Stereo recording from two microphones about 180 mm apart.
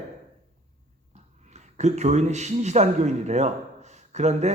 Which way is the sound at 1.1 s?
40° right (ahead or behind).